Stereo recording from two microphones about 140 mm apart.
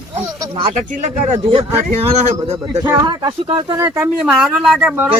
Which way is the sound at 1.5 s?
45° right (ahead or behind).